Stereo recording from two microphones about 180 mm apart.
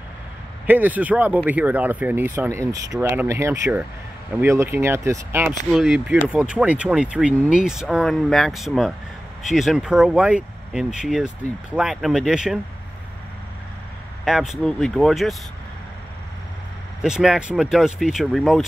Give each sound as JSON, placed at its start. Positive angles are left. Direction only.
{"t": 0.7, "sound": "speech", "side_deg": -10}
{"t": 5.7, "sound": "speech", "side_deg": 0}
{"t": 14.2, "sound": "speech", "side_deg": 0}
{"t": 17.0, "sound": "speech", "side_deg": -5}